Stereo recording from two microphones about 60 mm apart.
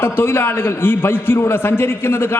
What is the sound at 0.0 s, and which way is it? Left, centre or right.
A man's voice, left.